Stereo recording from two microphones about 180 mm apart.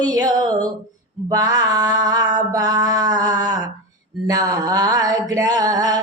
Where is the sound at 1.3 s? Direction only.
20° right (ahead or behind).